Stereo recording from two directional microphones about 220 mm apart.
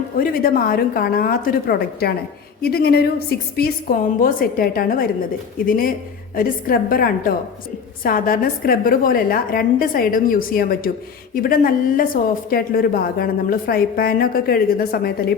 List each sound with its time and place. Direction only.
0.2 s a woman's voice: 40° left (ahead or behind)